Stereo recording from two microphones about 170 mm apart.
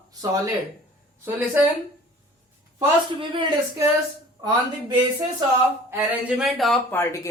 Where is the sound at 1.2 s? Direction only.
10° right (ahead or behind).